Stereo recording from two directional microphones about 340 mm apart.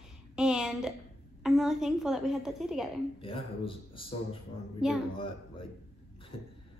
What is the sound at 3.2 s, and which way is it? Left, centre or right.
A man's voice, centre.